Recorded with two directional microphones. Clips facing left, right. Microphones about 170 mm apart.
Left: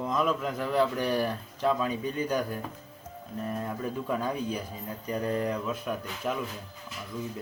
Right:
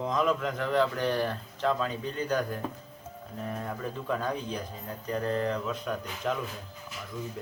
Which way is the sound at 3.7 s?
5° left (ahead or behind).